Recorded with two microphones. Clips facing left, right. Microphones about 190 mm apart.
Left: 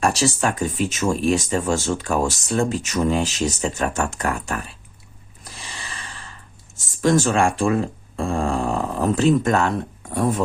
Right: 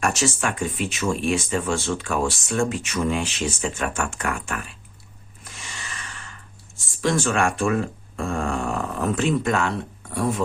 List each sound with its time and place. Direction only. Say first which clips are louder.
0.0 s speech: left 3 dB; 35° left (ahead or behind)
5.5 s snort: left 2 dB; 30° left (ahead or behind)
6.7 s speech: left 5 dB; 40° left (ahead or behind)